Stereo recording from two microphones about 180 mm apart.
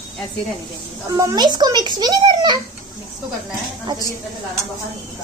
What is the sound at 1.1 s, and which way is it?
A child's voice, 20° right (ahead or behind).